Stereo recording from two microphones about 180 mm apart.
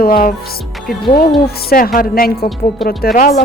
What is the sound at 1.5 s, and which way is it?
Speech, 55° left (ahead or behind).